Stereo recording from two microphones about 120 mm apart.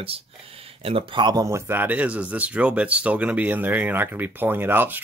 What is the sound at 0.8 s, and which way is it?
Speech, 45° right (ahead or behind).